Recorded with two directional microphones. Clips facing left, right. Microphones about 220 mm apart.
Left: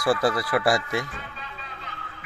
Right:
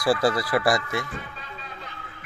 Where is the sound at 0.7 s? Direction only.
15° left (ahead or behind).